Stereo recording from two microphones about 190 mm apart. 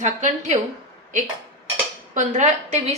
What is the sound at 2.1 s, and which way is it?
Speech, 40° right (ahead or behind).